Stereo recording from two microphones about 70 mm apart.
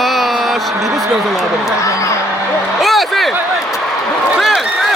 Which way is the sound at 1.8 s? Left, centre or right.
Left.